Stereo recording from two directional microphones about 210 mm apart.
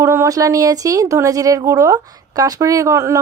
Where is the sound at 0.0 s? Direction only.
15° right (ahead or behind).